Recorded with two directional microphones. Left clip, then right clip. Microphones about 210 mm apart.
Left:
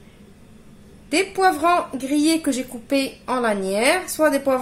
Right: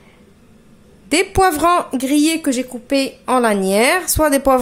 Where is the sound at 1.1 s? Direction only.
40° right (ahead or behind).